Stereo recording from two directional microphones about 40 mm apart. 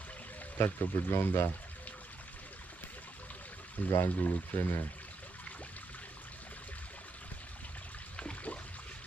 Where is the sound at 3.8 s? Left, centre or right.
Left.